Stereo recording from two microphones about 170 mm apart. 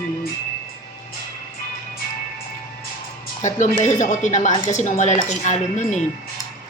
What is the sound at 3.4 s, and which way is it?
Speech, 45° left (ahead or behind).